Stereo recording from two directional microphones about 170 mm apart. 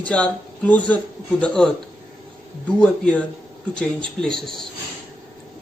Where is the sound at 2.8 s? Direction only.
5° left (ahead or behind).